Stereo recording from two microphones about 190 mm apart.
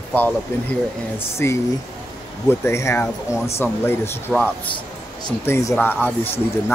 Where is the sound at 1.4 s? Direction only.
10° left (ahead or behind).